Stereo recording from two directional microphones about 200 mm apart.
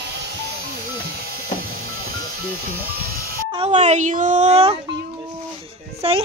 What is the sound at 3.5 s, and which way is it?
A child's voice, 30° right (ahead or behind).